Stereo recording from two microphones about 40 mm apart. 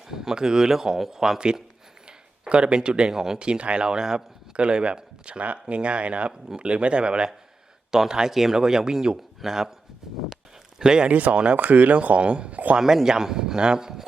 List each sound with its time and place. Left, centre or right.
0.1 s speech: centre
2.5 s speech: right
4.5 s speech: right
7.9 s speech: centre
10.8 s speech: centre
11.1 s speech: right
12.7 s speech: centre